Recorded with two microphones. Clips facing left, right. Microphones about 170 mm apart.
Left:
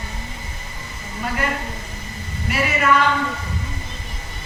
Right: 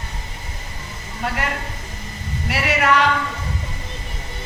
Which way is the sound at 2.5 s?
75° right (ahead or behind).